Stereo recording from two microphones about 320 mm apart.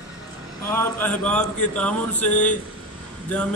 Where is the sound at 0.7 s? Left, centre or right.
Centre.